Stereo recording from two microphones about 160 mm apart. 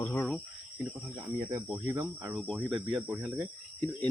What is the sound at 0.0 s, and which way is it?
Cricket, 10° left (ahead or behind).